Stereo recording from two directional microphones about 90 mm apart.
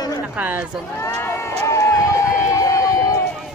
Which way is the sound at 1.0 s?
30° left (ahead or behind).